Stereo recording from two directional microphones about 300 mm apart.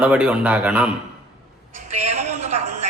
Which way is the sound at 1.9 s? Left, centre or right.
Right.